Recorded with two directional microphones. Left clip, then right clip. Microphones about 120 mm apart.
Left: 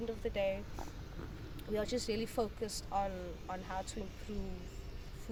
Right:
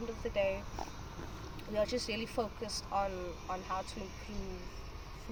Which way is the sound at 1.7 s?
25° left (ahead or behind).